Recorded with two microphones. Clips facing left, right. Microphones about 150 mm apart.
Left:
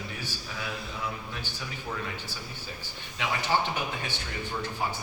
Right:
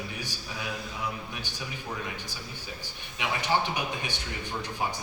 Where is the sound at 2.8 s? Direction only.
15° right (ahead or behind).